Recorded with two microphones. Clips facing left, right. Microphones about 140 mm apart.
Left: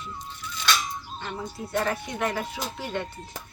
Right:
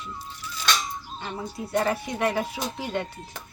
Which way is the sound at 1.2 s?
10° right (ahead or behind).